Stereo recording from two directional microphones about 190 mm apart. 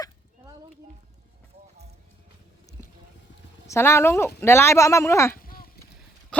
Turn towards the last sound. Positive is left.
turn(degrees=15)  # may be behind; listen again after turning